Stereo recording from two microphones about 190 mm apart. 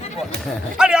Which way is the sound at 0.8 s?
5° right (ahead or behind).